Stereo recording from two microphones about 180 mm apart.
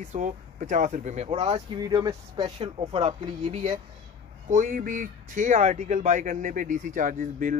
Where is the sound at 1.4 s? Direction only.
25° right (ahead or behind).